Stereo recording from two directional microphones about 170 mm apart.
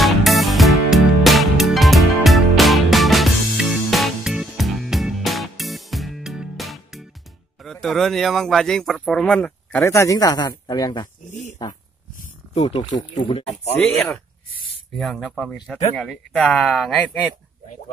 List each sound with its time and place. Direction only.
0.0 s music: centre (ahead or behind)
7.6 s speech: centre (ahead or behind); by 11.1 s 25° left (ahead or behind)
11.3 s speech: 40° left (ahead or behind)
13.8 s speech: 5° left (ahead or behind)